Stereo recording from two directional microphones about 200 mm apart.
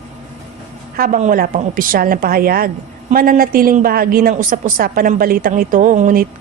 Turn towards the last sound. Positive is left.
turn(degrees=-40)  # may be behind; listen again after turning